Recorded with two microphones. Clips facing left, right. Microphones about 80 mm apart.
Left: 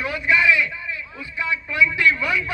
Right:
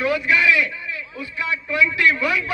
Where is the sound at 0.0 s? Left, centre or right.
Left.